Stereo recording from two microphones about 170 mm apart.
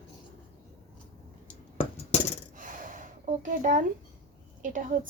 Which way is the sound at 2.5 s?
50° right (ahead or behind).